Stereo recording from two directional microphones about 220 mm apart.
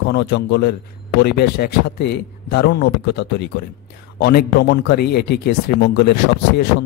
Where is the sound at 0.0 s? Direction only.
50° left (ahead or behind).